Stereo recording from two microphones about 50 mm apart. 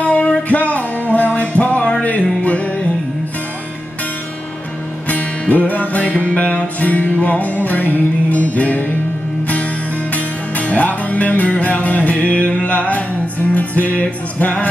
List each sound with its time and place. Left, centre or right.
0.0 s music: left
5.0 s music: left
10.1 s music: left